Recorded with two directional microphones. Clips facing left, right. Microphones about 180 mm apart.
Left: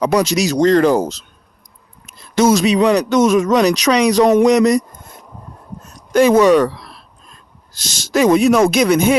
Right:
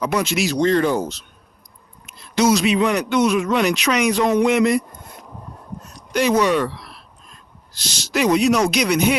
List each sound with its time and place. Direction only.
0.0 s a man's voice: 35° left (ahead or behind)
2.0 s a man's voice: 50° left (ahead or behind)
6.1 s speech: 50° left (ahead or behind)